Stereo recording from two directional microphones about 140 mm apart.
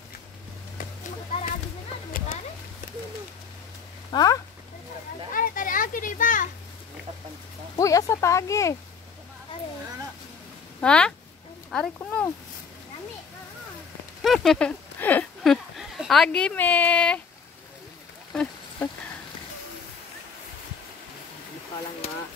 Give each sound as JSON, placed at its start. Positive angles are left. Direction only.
{"t": 2.1, "sound": "a sound", "side_deg": 85}
{"t": 4.1, "sound": "speech", "side_deg": 25}
{"t": 5.3, "sound": "children playing", "side_deg": 85}
{"t": 7.7, "sound": "speech", "side_deg": 25}
{"t": 10.8, "sound": "speech", "side_deg": 5}
{"t": 14.2, "sound": "speech", "side_deg": 0}
{"t": 15.0, "sound": "a sound", "side_deg": 15}
{"t": 15.4, "sound": "speech", "side_deg": 0}
{"t": 18.3, "sound": "a sound", "side_deg": 10}